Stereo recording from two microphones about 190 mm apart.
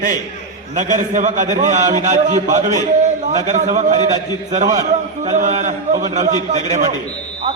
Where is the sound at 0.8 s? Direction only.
40° right (ahead or behind).